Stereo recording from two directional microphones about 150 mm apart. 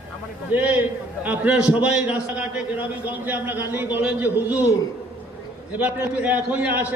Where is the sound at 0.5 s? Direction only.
10° right (ahead or behind).